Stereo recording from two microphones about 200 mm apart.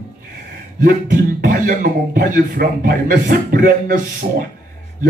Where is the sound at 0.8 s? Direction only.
45° right (ahead or behind).